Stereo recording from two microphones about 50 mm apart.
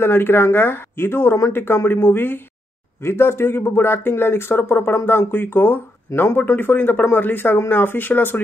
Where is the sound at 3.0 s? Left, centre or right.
Left.